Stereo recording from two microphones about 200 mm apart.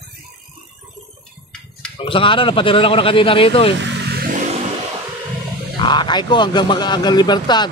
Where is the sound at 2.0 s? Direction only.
25° left (ahead or behind).